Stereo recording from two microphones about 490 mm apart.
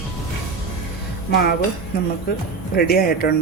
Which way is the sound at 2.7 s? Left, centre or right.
Centre.